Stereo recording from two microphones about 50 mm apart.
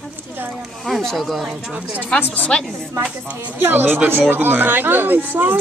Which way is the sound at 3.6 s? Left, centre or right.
Right.